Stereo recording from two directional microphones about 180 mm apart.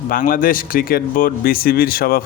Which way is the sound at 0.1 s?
50° left (ahead or behind).